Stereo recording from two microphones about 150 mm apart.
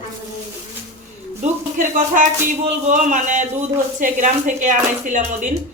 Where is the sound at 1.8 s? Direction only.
60° right (ahead or behind).